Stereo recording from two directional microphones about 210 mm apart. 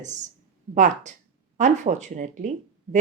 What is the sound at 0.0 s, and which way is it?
A woman's voice, 35° right (ahead or behind).